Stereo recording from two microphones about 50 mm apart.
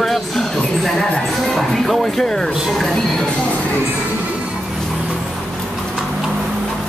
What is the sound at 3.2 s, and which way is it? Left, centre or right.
Music, centre.